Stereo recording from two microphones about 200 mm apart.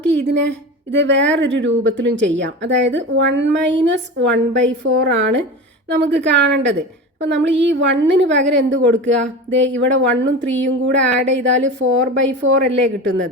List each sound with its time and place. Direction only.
0.3 s a woman's voice: 60° right (ahead or behind)